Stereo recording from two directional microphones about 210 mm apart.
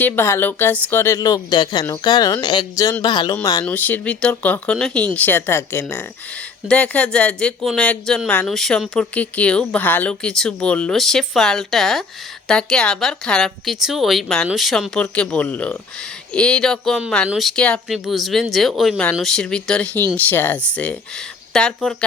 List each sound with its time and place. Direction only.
0.0 s speech: 10° left (ahead or behind)